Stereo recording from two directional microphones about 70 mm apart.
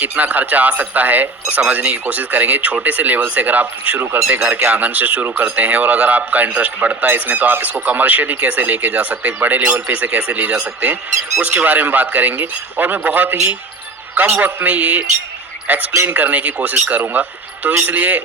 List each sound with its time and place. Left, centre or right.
0.0 s a man's voice: right